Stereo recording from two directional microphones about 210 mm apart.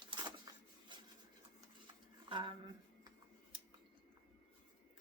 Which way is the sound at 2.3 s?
25° right (ahead or behind).